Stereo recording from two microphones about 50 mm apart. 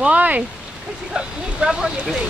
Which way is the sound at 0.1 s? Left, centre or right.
Right.